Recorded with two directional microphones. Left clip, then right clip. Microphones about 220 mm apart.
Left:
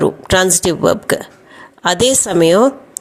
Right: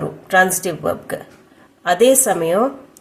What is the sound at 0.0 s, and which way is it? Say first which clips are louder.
Speech: left 2 dB; 40° left (ahead or behind).